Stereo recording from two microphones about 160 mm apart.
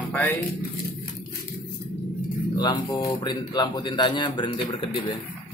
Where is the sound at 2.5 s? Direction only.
25° left (ahead or behind).